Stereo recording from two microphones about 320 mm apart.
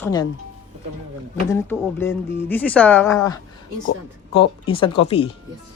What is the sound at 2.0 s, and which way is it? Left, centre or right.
Speech, centre.